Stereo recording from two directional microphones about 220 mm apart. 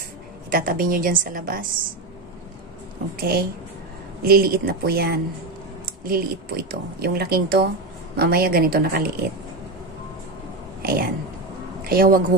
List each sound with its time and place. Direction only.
0.5 s a woman's voice: 40° right (ahead or behind)
3.2 s speech: 45° right (ahead or behind)
10.8 s a sound: 45° right (ahead or behind)
11.8 s speech: 40° right (ahead or behind)